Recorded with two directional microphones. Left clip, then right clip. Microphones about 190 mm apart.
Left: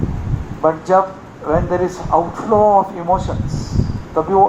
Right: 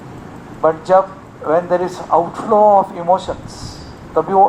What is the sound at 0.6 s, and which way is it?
Speech, 30° right (ahead or behind).